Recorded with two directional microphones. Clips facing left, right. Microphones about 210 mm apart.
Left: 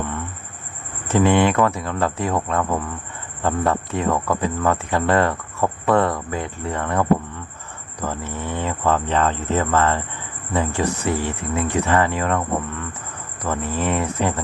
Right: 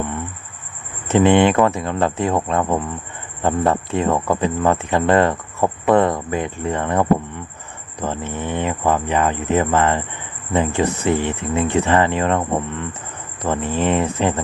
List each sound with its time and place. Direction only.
1.0 s speech: 20° right (ahead or behind)